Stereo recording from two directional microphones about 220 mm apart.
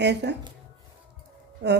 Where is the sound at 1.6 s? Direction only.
50° right (ahead or behind).